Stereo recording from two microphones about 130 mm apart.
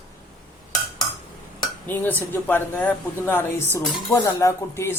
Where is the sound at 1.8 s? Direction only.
15° left (ahead or behind).